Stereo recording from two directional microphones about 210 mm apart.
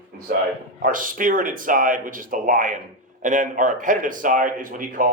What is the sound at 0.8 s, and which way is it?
Speech, 40° right (ahead or behind).